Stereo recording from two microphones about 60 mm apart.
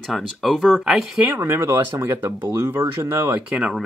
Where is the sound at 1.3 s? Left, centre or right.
Right.